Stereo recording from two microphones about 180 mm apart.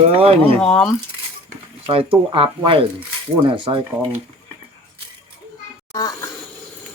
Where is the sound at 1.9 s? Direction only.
30° right (ahead or behind).